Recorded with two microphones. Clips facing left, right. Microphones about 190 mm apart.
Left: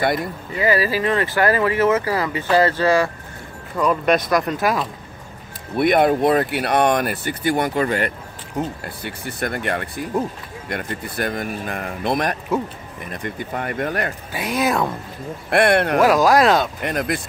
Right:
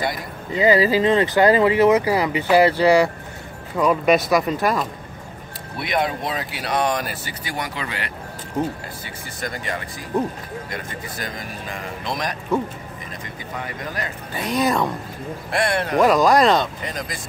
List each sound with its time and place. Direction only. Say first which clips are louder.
0.5 s speech: right 3 dB; 20° right (ahead or behind); by 4.8 s centre (ahead or behind)
5.8 s speech: left 8 dB; 55° left (ahead or behind)
8.8 s speech: left 5 dB; 60° left (ahead or behind)
14.3 s speech: right 1 dB; 5° left (ahead or behind)
15.5 s speech: left 6 dB; 60° left (ahead or behind)
16.0 s speech: right 2 dB; 5° left (ahead or behind)
16.8 s speech: left 7 dB; 60° left (ahead or behind)